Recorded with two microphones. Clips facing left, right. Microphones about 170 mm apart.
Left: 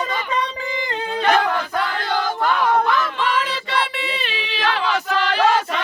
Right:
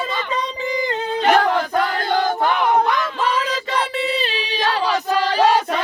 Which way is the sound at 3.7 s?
40° right (ahead or behind).